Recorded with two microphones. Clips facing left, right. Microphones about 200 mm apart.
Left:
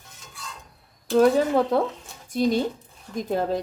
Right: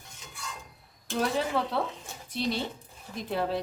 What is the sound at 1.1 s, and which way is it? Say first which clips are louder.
Speech: left 10 dB; 45° left (ahead or behind).